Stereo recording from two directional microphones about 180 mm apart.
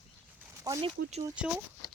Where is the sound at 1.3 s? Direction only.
5° right (ahead or behind).